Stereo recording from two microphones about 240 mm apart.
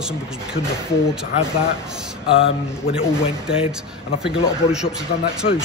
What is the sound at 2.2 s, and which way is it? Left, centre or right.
Speech, left.